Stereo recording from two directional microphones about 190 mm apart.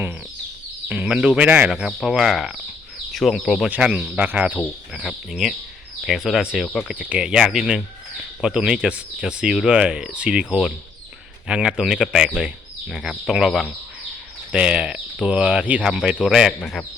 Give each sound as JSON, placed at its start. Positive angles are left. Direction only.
{"t": 0.9, "sound": "speech", "side_deg": -5}